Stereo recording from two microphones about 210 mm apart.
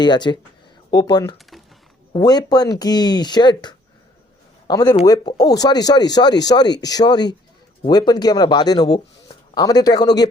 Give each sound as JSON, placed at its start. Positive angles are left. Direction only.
{"t": 0.0, "sound": "a man's voice", "side_deg": 20}